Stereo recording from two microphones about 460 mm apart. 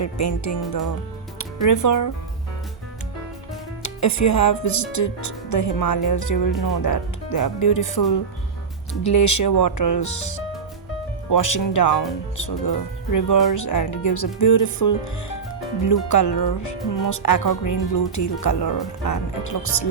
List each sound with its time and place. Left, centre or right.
0.0 s speech: left
1.6 s speech: left
3.8 s speech: left